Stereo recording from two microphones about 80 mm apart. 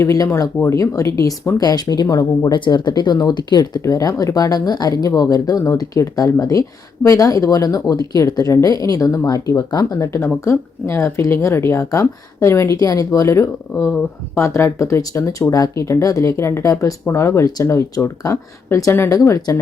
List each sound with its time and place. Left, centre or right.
0.0 s speech: left
2.6 s speech: left
3.8 s speech: left
9.9 s speech: left